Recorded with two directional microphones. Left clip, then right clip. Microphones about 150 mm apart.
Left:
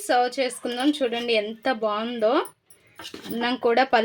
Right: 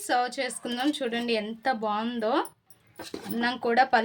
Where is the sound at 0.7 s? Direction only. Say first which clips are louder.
Left 4 dB; 30° left (ahead or behind).